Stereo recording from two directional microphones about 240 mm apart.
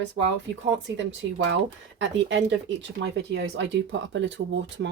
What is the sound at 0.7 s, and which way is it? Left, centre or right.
Speech, right.